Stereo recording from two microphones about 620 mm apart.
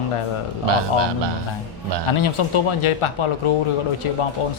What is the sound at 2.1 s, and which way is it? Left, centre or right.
A man's voice, left.